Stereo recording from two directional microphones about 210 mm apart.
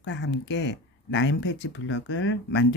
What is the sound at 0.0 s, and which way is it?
Speech, 55° left (ahead or behind).